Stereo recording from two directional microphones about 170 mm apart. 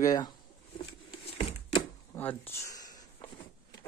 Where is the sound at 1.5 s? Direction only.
35° left (ahead or behind).